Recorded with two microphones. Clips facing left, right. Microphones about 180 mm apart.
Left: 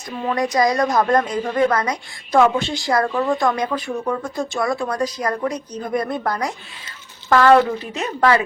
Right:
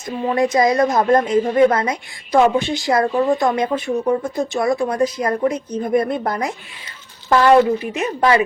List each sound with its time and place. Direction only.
0.3 s a woman's voice: 25° right (ahead or behind)